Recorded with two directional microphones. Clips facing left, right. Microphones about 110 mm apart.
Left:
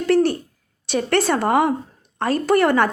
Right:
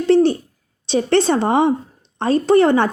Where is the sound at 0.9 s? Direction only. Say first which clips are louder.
Right 3 dB; 25° right (ahead or behind).